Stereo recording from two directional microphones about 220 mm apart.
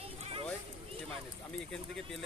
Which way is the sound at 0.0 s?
25° right (ahead or behind).